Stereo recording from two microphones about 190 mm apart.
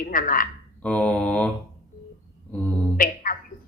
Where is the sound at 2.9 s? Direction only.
50° left (ahead or behind).